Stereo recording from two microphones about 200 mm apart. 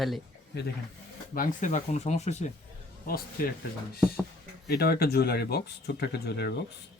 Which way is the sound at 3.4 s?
45° left (ahead or behind).